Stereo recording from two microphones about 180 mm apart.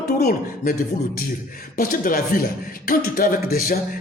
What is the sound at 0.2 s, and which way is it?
Speech, 55° left (ahead or behind).